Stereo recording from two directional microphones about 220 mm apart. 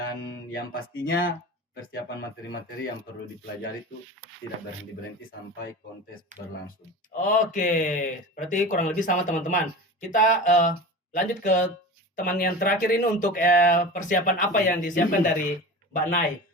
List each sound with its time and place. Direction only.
0.5 s speech: 45° left (ahead or behind); by 2.6 s 60° left (ahead or behind)
7.1 s speech: 35° left (ahead or behind)